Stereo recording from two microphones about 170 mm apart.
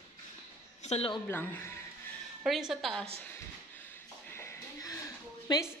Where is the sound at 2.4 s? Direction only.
Centre (ahead or behind).